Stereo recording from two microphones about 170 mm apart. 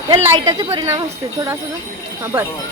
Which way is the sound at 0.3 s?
25° right (ahead or behind).